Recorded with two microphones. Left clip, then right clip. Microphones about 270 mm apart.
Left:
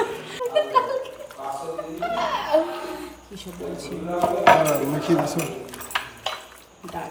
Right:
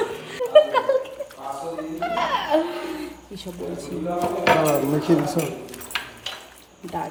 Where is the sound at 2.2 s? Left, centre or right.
Centre.